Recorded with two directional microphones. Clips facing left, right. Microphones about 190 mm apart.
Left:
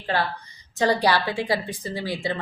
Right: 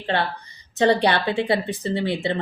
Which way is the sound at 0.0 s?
25° right (ahead or behind).